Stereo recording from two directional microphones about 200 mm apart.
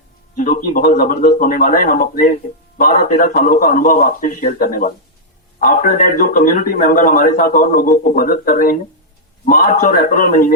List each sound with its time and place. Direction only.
0.3 s speech: 40° left (ahead or behind)